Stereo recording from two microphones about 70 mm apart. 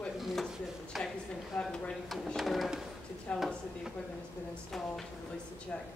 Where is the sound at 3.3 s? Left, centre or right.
Centre.